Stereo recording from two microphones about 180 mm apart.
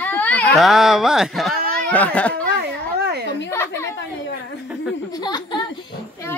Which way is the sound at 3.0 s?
65° right (ahead or behind).